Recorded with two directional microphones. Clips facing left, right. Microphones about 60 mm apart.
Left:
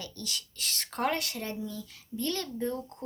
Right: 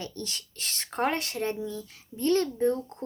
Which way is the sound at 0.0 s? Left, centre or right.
Right.